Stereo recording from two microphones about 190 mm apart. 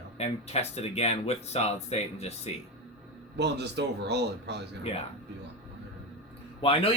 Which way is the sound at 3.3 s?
65° right (ahead or behind).